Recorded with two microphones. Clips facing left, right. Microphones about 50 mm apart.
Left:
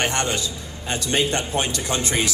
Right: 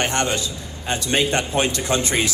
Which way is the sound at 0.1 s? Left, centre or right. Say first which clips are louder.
Right 2 dB; right.